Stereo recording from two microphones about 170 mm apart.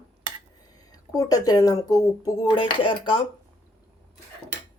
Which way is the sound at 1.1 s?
20° left (ahead or behind).